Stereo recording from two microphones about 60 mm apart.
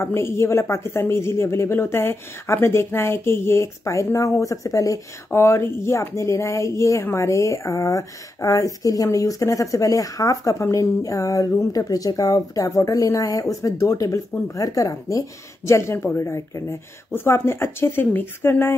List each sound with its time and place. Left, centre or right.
0.0 s speech: left
5.3 s speech: left
15.6 s speech: left
16.2 s speech: left
17.1 s speech: left